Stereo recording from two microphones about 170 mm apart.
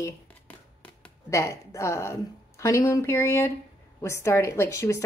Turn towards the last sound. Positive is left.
turn(degrees=15)  # may be behind; listen again after turning